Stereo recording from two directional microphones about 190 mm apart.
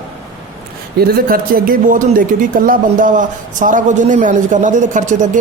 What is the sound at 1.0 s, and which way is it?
Speech, 50° right (ahead or behind).